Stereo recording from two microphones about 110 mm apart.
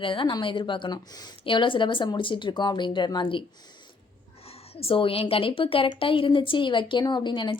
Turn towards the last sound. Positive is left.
turn(degrees=45)  # may be behind; listen again after turning